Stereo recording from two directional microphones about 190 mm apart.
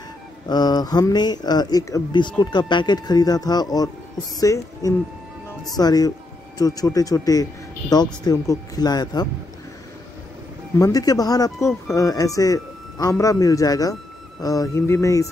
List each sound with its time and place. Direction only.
0.5 s speech: 20° left (ahead or behind)
10.8 s speech: 20° left (ahead or behind)